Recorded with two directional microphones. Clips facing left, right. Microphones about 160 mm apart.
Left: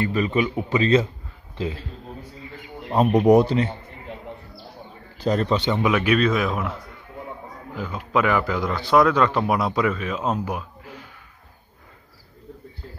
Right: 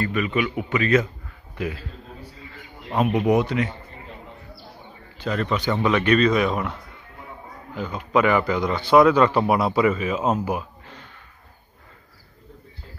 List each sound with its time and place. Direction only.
0.0 s a man's voice: 30° left (ahead or behind)
2.9 s a man's voice: 35° left (ahead or behind)
5.1 s a man's voice: 40° left (ahead or behind)
5.8 s speech: 10° left (ahead or behind)
10.8 s a sound: 10° left (ahead or behind)